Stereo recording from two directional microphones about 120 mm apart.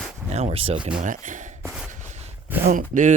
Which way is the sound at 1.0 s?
90° right.